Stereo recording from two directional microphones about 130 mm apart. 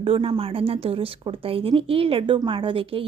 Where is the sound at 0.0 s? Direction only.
45° right (ahead or behind).